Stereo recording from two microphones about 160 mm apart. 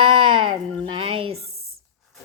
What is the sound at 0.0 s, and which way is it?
Sheep, 30° right (ahead or behind).